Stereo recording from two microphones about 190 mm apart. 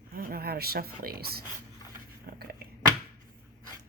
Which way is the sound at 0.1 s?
50° right (ahead or behind).